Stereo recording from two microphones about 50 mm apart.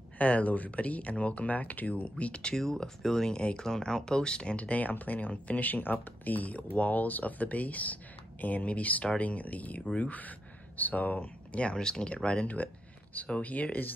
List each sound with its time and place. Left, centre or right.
0.2 s speech: left
2.5 s speech: centre
13.1 s speech: left